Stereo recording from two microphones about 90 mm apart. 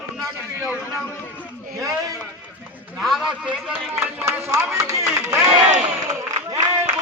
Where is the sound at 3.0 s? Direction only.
Centre (ahead or behind).